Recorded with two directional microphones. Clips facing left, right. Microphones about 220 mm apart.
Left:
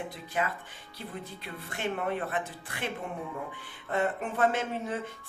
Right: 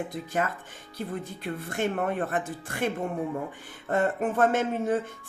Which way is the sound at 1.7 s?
45° right (ahead or behind).